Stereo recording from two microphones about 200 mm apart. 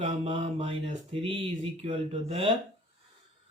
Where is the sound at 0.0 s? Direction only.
25° right (ahead or behind).